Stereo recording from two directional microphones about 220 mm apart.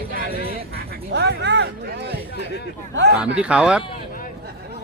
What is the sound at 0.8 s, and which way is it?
Duck, 50° right (ahead or behind).